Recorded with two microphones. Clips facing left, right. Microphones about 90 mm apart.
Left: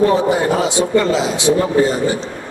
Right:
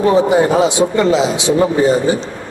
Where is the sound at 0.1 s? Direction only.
20° right (ahead or behind).